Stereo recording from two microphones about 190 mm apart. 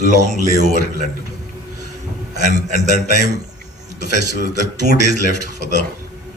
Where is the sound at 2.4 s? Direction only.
40° right (ahead or behind).